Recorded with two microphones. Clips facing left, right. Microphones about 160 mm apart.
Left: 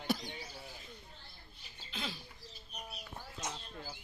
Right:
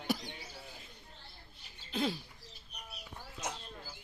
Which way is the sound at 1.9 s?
45° right (ahead or behind).